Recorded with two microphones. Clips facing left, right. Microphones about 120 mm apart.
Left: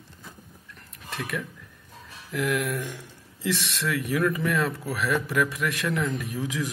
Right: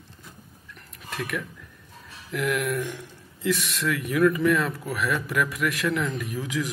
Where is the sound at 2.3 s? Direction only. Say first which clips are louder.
Right 1 dB; 25° left (ahead or behind).